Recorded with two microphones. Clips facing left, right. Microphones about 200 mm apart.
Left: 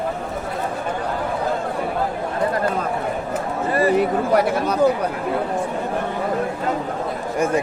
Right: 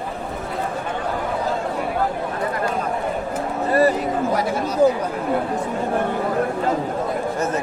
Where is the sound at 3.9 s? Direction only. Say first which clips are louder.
Left 4 dB; 65° left (ahead or behind).